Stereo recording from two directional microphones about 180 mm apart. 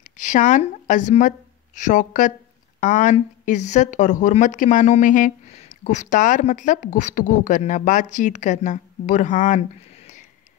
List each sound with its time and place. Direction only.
0.2 s speech: 45° left (ahead or behind)